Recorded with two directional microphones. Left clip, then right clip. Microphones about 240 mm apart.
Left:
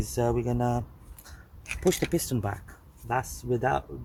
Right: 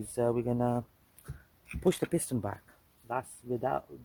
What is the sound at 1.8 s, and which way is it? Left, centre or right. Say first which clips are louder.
Speech: left 3 dB; right.